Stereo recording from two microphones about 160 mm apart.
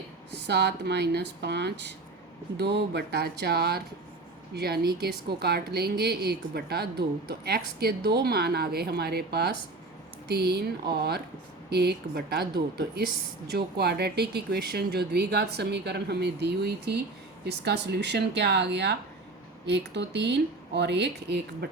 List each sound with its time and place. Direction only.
0.3 s speech: 90° right